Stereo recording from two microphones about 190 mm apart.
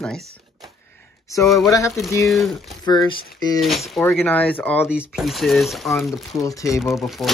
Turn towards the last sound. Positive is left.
turn(degrees=0)  # may be behind; listen again after turning